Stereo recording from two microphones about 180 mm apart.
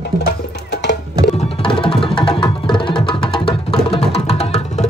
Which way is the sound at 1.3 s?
30° left (ahead or behind).